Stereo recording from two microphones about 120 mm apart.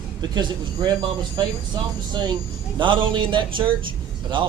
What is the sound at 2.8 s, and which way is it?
Speech, 40° right (ahead or behind).